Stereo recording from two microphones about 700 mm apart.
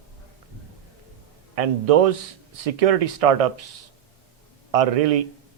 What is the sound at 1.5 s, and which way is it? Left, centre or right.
A man's voice, right.